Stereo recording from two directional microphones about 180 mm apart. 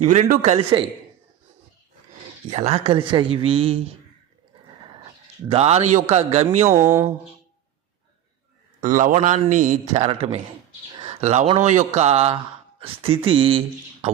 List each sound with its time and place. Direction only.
0.0 s speech: 40° right (ahead or behind)
2.5 s speech: 35° right (ahead or behind)
5.5 s speech: 35° right (ahead or behind)
6.7 s speech: 15° right (ahead or behind)
8.8 s a man's voice: 45° right (ahead or behind)
9.9 s speech: 35° right (ahead or behind)